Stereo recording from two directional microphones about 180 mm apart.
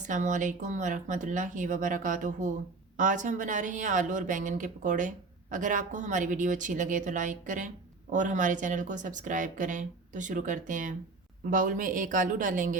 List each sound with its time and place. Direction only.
0.1 s speech: 45° right (ahead or behind)